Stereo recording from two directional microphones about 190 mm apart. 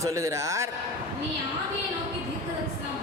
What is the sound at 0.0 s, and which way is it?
Speech, 15° right (ahead or behind).